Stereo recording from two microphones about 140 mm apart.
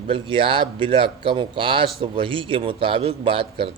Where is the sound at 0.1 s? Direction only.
40° right (ahead or behind).